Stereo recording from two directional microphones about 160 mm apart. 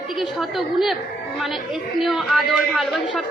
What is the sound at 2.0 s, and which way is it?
A woman's voice, centre (ahead or behind).